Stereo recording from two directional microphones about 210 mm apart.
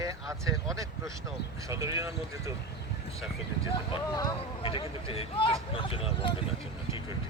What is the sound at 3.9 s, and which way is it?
Speech, 20° left (ahead or behind).